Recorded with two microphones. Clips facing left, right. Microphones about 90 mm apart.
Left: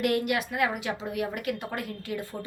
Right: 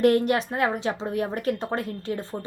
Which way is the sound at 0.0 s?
35° right (ahead or behind).